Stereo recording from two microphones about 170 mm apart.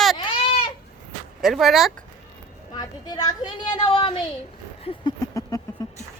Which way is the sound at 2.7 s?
25° left (ahead or behind).